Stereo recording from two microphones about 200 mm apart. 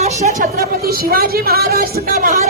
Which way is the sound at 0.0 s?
35° right (ahead or behind).